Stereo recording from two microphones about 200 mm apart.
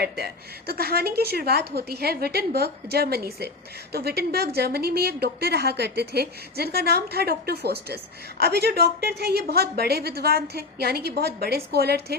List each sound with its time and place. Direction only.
0.7 s a woman's voice: 50° right (ahead or behind)